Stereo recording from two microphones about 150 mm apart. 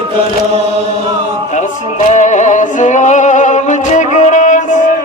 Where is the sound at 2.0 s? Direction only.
55° left (ahead or behind).